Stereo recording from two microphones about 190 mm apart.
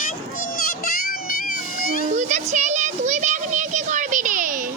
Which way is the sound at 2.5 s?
40° right (ahead or behind).